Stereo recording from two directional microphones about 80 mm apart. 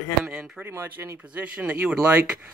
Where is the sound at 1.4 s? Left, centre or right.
Centre.